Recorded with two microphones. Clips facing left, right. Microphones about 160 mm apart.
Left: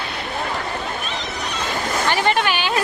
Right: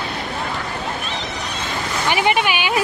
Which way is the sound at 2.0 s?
15° right (ahead or behind).